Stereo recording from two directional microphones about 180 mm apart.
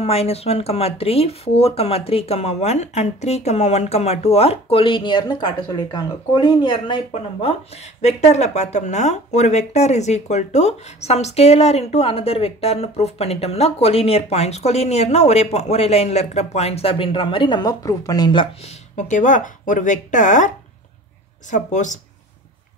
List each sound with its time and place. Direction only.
0.0 s speech: 35° left (ahead or behind)
18.9 s speech: 45° left (ahead or behind)